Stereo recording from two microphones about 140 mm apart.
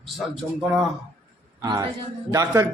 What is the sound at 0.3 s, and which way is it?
Speech, 5° right (ahead or behind).